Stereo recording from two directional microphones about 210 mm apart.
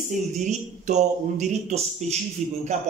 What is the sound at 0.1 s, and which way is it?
Speech, 35° right (ahead or behind).